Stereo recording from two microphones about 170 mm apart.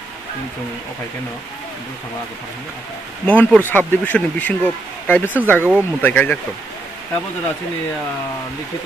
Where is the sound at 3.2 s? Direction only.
10° left (ahead or behind).